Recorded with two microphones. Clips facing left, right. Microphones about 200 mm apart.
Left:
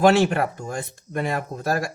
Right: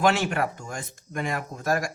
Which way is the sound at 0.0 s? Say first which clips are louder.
Left 6 dB; 35° left (ahead or behind).